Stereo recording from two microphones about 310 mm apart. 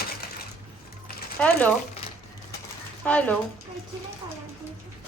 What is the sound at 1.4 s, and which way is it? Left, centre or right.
Speech, centre.